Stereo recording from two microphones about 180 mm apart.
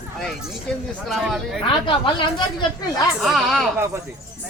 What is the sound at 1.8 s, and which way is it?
A woman's voice, 30° left (ahead or behind).